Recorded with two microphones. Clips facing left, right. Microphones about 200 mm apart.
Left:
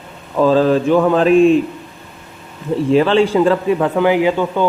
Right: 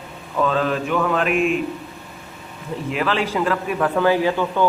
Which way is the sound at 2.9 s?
30° left (ahead or behind).